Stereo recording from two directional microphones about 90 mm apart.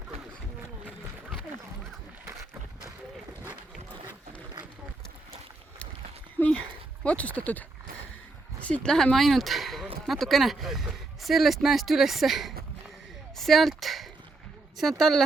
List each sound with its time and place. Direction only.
6.4 s speech: 15° left (ahead or behind)
8.6 s speech: 15° left (ahead or behind); by 12.5 s centre (ahead or behind)
13.3 s a sound: centre (ahead or behind)
14.8 s speech: centre (ahead or behind)